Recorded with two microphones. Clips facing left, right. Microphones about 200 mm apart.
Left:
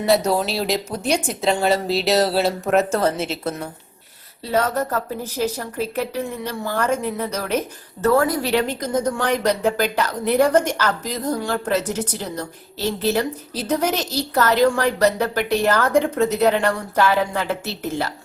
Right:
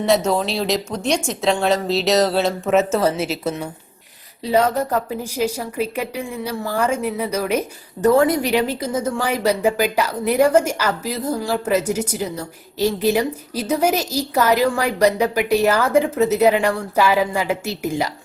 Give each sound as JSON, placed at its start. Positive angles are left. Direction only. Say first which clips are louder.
{"t": 0.3, "sound": "speech", "louder": "right 1 dB", "side_deg": 5}
{"t": 8.0, "sound": "speech", "louder": "right 3 dB", "side_deg": -20}